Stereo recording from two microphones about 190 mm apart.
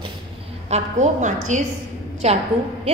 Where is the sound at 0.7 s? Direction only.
35° right (ahead or behind).